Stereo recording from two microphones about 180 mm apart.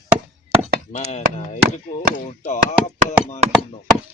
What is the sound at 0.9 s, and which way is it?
Chop, 35° left (ahead or behind).